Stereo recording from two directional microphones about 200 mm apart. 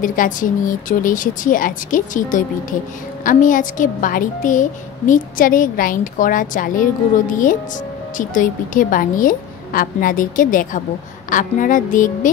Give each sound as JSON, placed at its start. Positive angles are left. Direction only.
{"t": 0.0, "sound": "a woman's voice", "side_deg": 40}